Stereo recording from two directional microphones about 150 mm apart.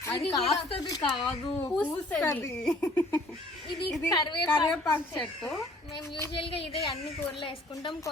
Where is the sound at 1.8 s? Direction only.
10° left (ahead or behind).